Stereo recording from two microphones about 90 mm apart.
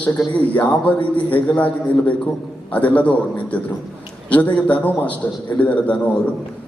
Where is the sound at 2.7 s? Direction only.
15° left (ahead or behind).